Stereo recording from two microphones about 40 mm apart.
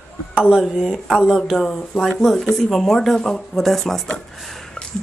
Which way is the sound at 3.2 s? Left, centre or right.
Centre.